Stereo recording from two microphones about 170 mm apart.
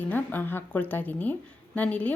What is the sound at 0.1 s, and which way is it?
A woman's voice, 10° left (ahead or behind).